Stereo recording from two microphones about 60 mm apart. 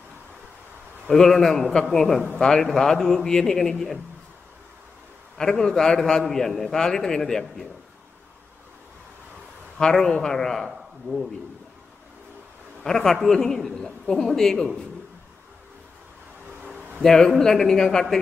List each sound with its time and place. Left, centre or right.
1.1 s a man's voice: centre
5.4 s a man's voice: centre
9.8 s a man's voice: centre
12.8 s a man's voice: centre
16.6 s a sound: right
17.0 s a man's voice: centre